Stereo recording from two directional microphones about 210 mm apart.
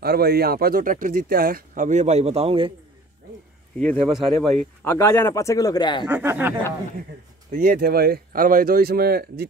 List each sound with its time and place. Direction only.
0.0 s speech: 50° right (ahead or behind); by 2.7 s 25° right (ahead or behind)
3.8 s speech: 5° left (ahead or behind)
6.0 s speech: 10° right (ahead or behind)
7.5 s speech: 45° right (ahead or behind)